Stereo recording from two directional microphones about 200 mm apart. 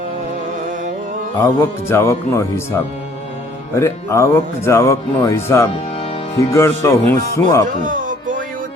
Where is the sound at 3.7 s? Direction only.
15° left (ahead or behind).